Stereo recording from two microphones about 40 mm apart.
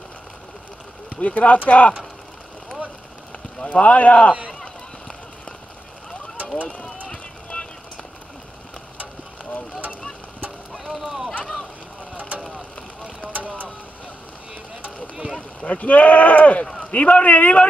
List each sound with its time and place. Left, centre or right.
1.1 s speech: left
3.7 s speech: left
7.1 s boat: left
10.8 s run: centre
12.4 s vehicle: centre
13.3 s vehicle: right
15.6 s speech: left